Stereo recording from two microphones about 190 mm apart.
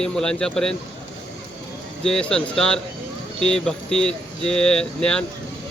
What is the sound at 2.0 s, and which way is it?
Speech, 5° left (ahead or behind).